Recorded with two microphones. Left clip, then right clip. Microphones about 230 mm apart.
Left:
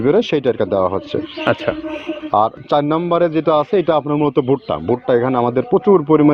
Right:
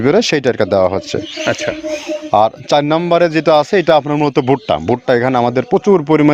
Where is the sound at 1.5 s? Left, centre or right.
Centre.